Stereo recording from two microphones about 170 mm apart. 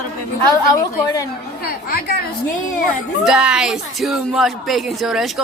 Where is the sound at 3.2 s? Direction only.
5° right (ahead or behind).